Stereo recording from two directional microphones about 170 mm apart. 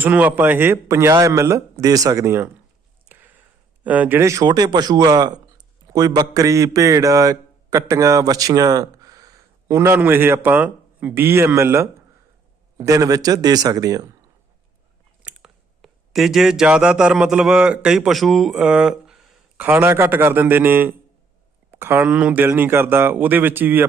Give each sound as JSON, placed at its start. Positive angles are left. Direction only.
{"t": 0.0, "sound": "a man's voice", "side_deg": -10}
{"t": 3.1, "sound": "a sound", "side_deg": -10}
{"t": 3.8, "sound": "a man's voice", "side_deg": -10}
{"t": 15.2, "sound": "a man's voice", "side_deg": -5}